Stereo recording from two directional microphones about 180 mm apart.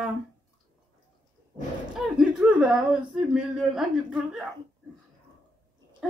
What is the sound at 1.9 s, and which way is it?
Speech, 5° right (ahead or behind).